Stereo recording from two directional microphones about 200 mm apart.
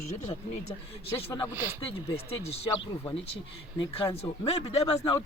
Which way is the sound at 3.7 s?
25° left (ahead or behind).